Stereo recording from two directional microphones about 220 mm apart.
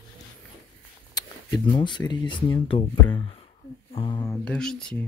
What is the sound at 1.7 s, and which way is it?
Speech, 20° left (ahead or behind).